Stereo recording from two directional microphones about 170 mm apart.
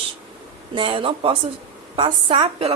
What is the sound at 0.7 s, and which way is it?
A woman's voice, 30° right (ahead or behind).